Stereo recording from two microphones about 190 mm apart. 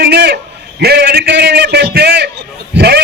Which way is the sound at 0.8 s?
60° right (ahead or behind).